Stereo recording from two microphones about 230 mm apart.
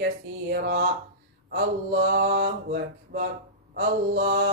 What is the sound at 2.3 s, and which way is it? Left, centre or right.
Mantra, right.